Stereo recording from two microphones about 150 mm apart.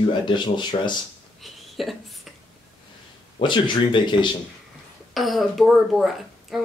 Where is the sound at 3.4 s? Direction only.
30° left (ahead or behind).